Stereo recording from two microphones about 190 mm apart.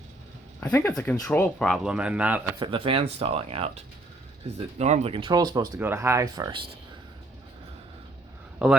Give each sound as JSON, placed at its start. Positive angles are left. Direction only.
{"t": 0.6, "sound": "speech", "side_deg": 10}
{"t": 2.6, "sound": "speech", "side_deg": -30}